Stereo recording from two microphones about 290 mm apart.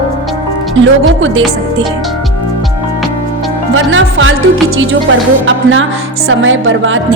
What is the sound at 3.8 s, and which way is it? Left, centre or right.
Speech, right.